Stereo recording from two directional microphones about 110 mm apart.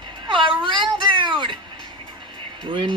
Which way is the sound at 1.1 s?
45° right (ahead or behind).